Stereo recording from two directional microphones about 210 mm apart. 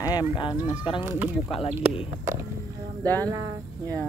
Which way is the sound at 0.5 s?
5° right (ahead or behind).